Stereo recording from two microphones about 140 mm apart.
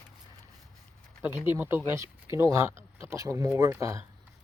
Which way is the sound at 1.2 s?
15° right (ahead or behind).